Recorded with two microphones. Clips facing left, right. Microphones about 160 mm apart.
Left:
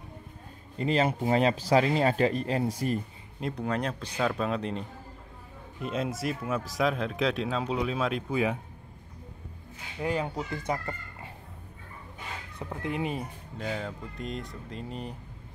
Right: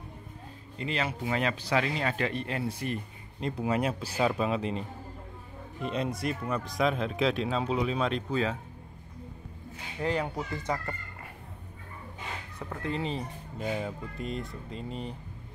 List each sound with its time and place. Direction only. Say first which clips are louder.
0.7 s speech: left 6 dB; 40° left (ahead or behind)
3.3 s speech: right 1 dB; centre (ahead or behind)
9.9 s speech: even; 10° left (ahead or behind)
12.5 s speech: left 1 dB; 15° left (ahead or behind)
13.6 s speech: right 1 dB; 10° right (ahead or behind)